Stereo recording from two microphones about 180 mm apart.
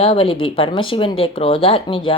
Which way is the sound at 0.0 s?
30° left (ahead or behind).